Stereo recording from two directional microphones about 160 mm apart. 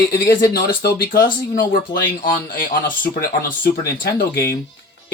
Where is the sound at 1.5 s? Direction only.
65° left (ahead or behind).